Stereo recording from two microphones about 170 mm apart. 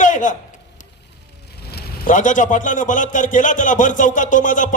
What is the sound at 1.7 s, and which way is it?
A man's voice, 50° left (ahead or behind).